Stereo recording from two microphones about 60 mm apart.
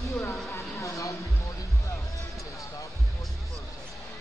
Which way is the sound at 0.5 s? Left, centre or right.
Left.